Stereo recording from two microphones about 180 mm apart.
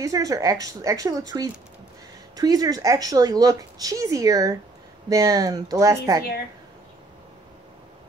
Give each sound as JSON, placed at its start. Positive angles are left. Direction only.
{"t": 0.0, "sound": "speech", "side_deg": -20}